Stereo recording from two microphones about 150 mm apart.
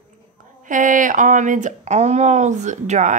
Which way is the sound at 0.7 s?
60° right (ahead or behind).